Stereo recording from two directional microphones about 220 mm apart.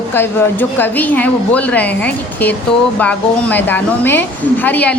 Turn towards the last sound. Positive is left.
turn(degrees=10)  # may be behind; listen again after turning